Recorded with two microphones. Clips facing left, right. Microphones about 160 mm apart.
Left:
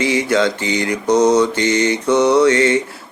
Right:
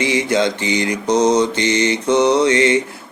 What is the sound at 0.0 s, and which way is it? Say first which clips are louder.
Mantra: left 1 dB; 20° right (ahead or behind).